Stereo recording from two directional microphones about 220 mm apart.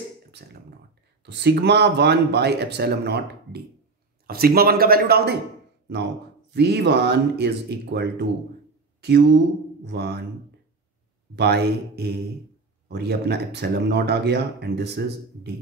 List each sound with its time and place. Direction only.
0.3 s beatboxing: 50° right (ahead or behind)
1.2 s speech: 50° right (ahead or behind)
6.5 s speech: 50° right (ahead or behind)
11.3 s speech: 45° right (ahead or behind)